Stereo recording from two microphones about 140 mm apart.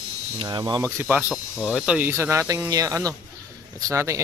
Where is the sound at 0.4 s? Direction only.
30° right (ahead or behind).